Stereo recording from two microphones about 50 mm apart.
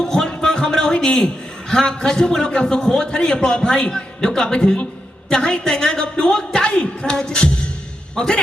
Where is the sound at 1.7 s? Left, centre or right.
Centre.